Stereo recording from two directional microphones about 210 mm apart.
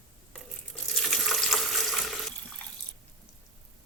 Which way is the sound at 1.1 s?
Centre (ahead or behind).